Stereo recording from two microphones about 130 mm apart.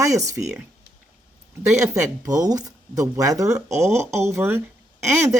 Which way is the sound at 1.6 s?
25° right (ahead or behind).